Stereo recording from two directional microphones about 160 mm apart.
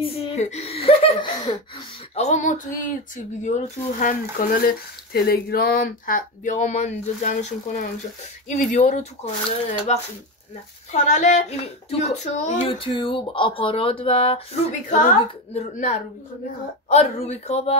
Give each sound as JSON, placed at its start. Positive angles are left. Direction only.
{"t": 0.0, "sound": "speech", "side_deg": 40}
{"t": 2.1, "sound": "speech", "side_deg": 50}
{"t": 12.7, "sound": "speech", "side_deg": 30}
{"t": 14.7, "sound": "speech", "side_deg": 50}